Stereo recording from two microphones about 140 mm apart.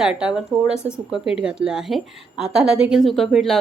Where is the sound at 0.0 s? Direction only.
5° right (ahead or behind).